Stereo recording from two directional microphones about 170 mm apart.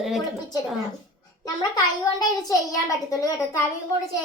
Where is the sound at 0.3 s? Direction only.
20° left (ahead or behind).